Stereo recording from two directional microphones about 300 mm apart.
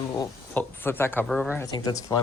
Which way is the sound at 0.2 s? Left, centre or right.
Centre.